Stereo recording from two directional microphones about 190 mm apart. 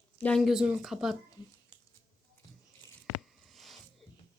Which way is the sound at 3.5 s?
Centre (ahead or behind).